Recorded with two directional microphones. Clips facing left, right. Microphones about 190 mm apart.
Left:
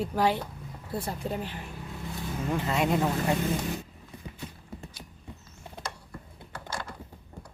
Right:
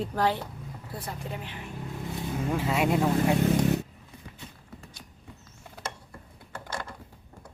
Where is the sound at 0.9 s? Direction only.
35° left (ahead or behind).